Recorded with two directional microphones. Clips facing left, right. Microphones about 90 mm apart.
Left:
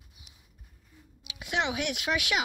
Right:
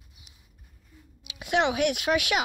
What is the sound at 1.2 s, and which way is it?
A woman's voice, 45° right (ahead or behind).